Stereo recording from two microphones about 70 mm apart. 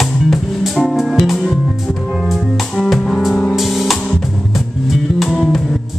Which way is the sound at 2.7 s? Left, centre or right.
Centre.